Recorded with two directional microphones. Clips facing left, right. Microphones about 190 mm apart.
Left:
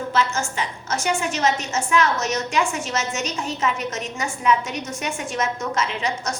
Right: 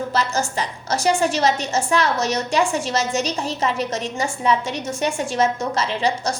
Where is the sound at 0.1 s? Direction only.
35° right (ahead or behind).